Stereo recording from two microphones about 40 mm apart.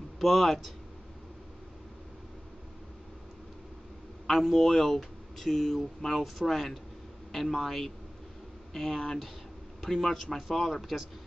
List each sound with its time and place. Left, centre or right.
0.2 s speech: centre
4.3 s speech: centre